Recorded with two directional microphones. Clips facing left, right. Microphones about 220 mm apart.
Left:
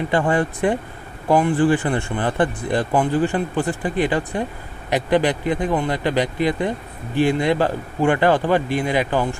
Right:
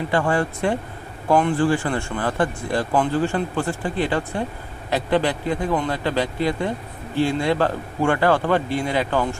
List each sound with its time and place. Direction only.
0.1 s speech: 20° left (ahead or behind)